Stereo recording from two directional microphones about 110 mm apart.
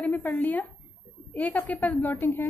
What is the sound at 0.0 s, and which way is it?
A woman's voice, 15° left (ahead or behind).